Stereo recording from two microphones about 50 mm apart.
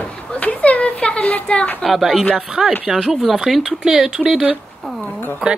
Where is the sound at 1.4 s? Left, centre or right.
Left.